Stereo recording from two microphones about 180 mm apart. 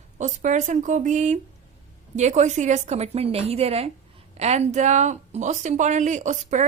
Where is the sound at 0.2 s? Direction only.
40° right (ahead or behind).